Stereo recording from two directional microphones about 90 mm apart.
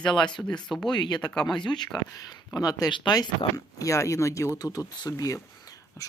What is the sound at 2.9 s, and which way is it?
Speech, 60° left (ahead or behind).